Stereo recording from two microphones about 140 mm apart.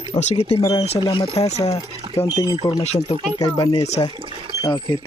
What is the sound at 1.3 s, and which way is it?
Speech, 50° left (ahead or behind).